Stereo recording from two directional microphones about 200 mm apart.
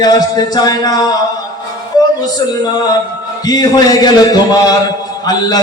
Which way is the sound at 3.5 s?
20° left (ahead or behind).